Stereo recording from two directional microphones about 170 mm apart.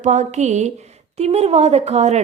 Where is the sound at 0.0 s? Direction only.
45° right (ahead or behind).